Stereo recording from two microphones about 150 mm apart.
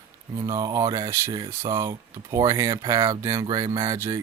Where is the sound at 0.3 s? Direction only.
25° right (ahead or behind).